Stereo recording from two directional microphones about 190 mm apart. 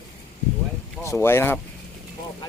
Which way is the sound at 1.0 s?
15° left (ahead or behind).